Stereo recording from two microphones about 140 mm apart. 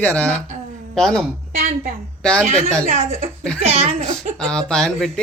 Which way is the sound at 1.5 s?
55° right (ahead or behind).